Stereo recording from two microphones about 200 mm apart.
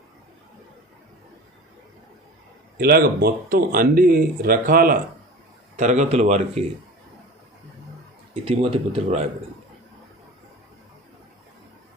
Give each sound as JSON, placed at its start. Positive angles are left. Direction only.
{"t": 2.7, "sound": "speech", "side_deg": -50}
{"t": 8.4, "sound": "speech", "side_deg": -30}